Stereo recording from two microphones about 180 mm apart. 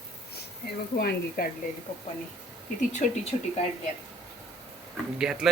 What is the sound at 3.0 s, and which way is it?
Speech, 45° left (ahead or behind).